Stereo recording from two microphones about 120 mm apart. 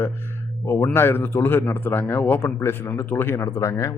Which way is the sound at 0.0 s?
20° left (ahead or behind).